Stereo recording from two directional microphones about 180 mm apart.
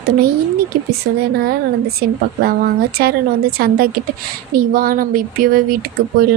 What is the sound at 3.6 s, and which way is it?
Speech, 60° right (ahead or behind).